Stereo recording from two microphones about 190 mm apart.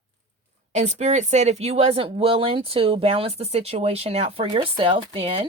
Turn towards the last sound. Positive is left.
turn(degrees=-30)  # may be behind; listen again after turning